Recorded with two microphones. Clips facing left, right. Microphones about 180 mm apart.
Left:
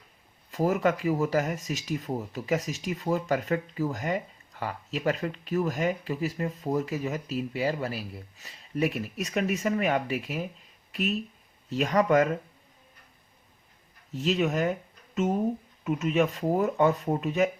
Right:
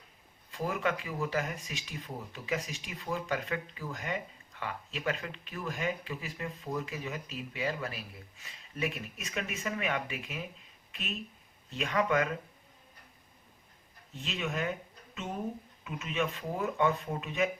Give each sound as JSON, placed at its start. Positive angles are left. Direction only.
{"t": 0.5, "sound": "speech", "side_deg": 40}
{"t": 14.1, "sound": "speech", "side_deg": 40}